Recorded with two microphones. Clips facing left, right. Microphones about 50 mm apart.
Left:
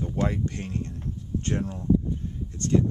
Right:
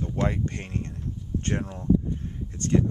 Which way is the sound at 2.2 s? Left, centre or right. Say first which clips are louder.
Even; right.